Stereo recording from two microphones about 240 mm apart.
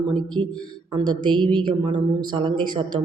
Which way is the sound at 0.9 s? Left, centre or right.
Centre.